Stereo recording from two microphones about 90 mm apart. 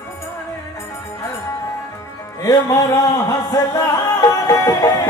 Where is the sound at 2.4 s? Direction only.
40° left (ahead or behind).